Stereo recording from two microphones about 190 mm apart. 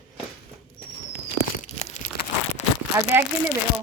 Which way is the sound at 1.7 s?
35° left (ahead or behind).